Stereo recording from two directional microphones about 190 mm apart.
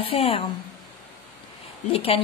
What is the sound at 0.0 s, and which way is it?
Speech, 30° left (ahead or behind).